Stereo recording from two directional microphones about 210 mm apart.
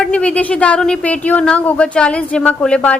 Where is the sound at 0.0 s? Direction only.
5° left (ahead or behind).